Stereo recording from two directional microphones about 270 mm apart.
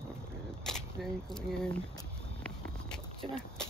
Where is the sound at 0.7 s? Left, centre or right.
Centre.